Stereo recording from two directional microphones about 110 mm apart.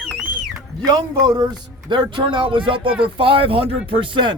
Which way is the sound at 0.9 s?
40° right (ahead or behind).